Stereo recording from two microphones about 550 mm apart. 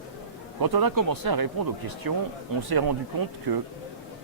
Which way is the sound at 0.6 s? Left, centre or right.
Right.